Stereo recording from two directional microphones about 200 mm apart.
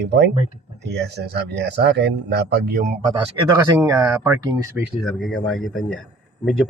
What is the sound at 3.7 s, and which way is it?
Speech, 20° right (ahead or behind).